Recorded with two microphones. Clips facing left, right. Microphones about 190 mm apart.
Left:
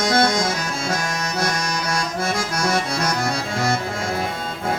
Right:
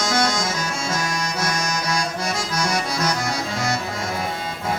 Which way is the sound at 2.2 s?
55° left (ahead or behind).